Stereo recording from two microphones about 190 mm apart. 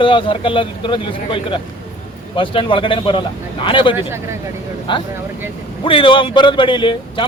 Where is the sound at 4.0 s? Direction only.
10° right (ahead or behind).